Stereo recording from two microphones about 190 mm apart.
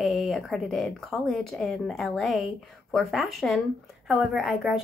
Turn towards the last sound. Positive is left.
turn(degrees=0)  # may be behind; listen again after turning